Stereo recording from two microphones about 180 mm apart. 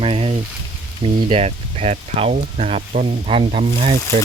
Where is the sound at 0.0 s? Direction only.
30° right (ahead or behind).